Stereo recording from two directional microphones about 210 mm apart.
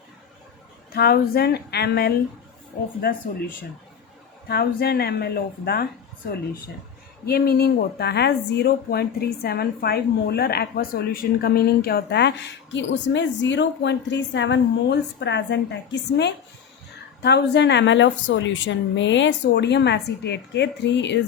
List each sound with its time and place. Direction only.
0.9 s a woman's voice: 50° left (ahead or behind)
4.4 s a woman's voice: 50° left (ahead or behind)
7.3 s a woman's voice: 50° left (ahead or behind)